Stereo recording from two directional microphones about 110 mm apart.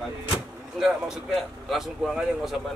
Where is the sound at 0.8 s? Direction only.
Centre (ahead or behind).